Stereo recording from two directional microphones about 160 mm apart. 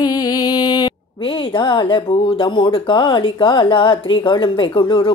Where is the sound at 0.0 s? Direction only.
25° left (ahead or behind).